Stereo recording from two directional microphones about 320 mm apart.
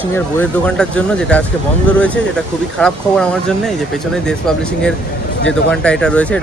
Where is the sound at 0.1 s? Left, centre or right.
Centre.